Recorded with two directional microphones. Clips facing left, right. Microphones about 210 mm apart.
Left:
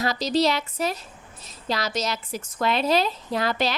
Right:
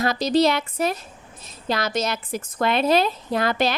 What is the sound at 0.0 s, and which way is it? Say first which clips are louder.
A woman's voice: right 3 dB; 55° right (ahead or behind).